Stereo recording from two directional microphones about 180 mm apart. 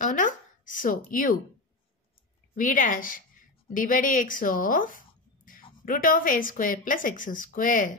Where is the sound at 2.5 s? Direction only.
45° left (ahead or behind).